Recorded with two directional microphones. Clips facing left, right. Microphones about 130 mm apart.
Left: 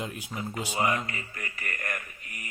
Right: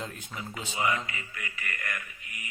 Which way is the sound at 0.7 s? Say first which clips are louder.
Left 1 dB; 40° left (ahead or behind).